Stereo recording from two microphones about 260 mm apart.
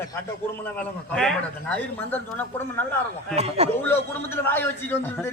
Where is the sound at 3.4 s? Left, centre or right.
Right.